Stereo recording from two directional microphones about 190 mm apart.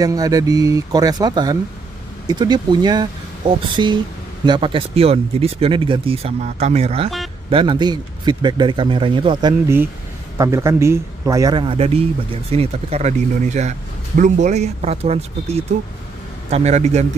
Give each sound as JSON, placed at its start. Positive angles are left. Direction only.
{"t": 0.0, "sound": "a man's voice", "side_deg": -20}